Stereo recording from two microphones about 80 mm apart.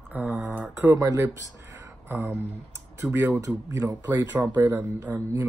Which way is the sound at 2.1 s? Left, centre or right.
Right.